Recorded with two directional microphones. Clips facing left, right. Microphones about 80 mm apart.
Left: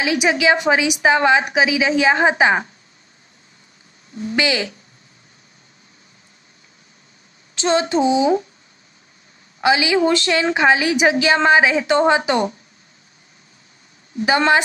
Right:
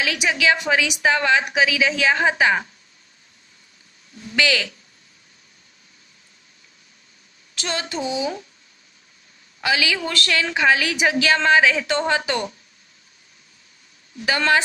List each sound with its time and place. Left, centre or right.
0.0 s a woman's voice: left
4.1 s a woman's voice: left
7.5 s a woman's voice: left
9.6 s a woman's voice: left
14.1 s a woman's voice: left